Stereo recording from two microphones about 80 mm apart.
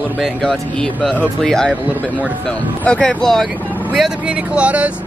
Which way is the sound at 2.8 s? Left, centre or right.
Centre.